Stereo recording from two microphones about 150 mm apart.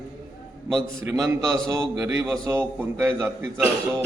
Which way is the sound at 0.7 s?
5° left (ahead or behind).